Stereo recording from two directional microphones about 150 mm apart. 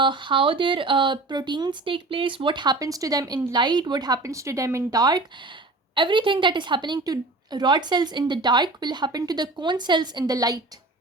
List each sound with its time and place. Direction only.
0.0 s speech: 35° right (ahead or behind)